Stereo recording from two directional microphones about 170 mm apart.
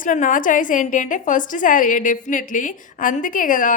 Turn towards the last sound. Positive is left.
turn(degrees=50)  # may be behind; listen again after turning